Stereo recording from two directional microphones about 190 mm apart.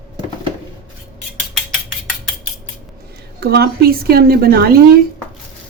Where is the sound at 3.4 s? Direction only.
55° right (ahead or behind).